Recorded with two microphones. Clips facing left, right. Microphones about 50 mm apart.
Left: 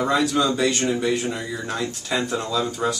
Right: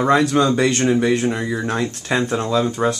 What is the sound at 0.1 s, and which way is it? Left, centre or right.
Speech, right.